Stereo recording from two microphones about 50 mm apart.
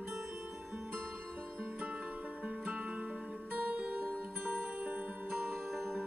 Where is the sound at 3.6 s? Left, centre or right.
Right.